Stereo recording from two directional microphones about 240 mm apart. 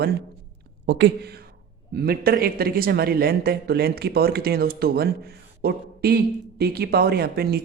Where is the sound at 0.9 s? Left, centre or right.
Right.